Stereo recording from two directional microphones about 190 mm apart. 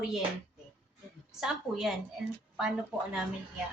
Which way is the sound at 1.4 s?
Centre (ahead or behind).